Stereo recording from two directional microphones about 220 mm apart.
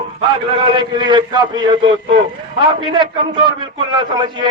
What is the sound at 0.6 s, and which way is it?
A man's voice, 20° right (ahead or behind).